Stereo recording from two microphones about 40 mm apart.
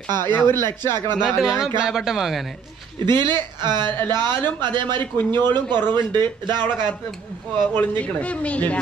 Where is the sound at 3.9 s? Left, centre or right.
Left.